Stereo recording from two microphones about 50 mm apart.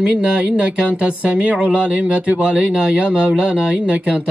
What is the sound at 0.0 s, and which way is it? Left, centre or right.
Speech, centre.